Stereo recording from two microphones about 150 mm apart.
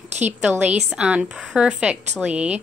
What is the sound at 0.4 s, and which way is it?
Speech, 10° right (ahead or behind).